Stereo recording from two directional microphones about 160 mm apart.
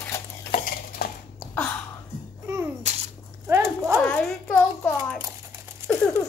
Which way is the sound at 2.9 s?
45° right (ahead or behind).